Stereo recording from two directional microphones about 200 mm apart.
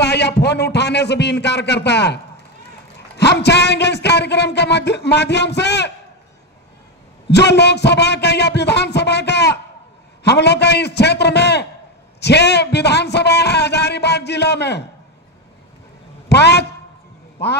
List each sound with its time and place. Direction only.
0.0 s speech: 55° left (ahead or behind)
3.2 s speech: 55° left (ahead or behind)
7.2 s speech: 60° left (ahead or behind)
16.3 s a man's voice: 55° left (ahead or behind)